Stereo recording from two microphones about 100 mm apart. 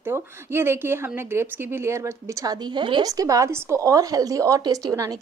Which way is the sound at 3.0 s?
35° right (ahead or behind).